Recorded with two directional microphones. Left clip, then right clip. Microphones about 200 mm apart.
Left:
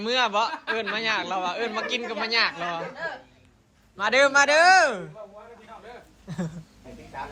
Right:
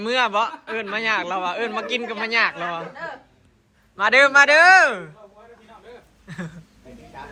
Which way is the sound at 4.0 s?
10° left (ahead or behind).